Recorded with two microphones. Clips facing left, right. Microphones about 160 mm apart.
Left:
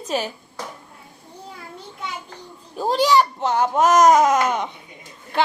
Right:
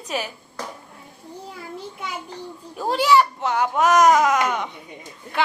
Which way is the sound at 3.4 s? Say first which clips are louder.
Left 2 dB; 40° left (ahead or behind).